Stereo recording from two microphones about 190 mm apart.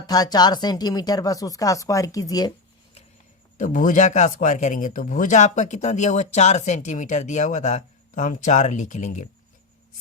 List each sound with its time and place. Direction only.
0.1 s speech: 20° left (ahead or behind)
3.6 s speech: 45° left (ahead or behind)